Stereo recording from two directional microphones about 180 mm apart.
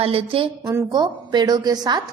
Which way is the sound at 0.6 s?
15° right (ahead or behind).